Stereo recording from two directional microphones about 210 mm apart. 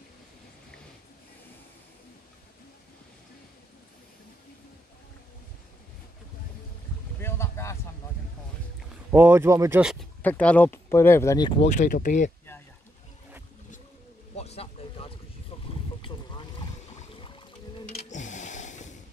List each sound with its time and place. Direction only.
7.2 s boat: 10° left (ahead or behind)
9.1 s speech: 10° right (ahead or behind)
10.2 s speech: 5° left (ahead or behind); by 12.3 s 35° left (ahead or behind)
14.3 s a sound: 30° left (ahead or behind)
15.5 s boat: 25° left (ahead or behind)
17.9 s a sound: 35° left (ahead or behind)